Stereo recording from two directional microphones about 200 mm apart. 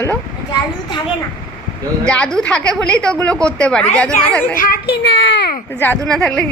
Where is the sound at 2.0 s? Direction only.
5° left (ahead or behind).